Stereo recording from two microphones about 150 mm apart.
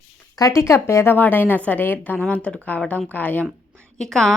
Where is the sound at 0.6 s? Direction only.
20° left (ahead or behind).